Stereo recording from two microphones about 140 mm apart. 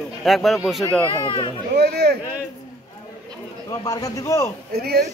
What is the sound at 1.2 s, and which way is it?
Speech, 35° left (ahead or behind).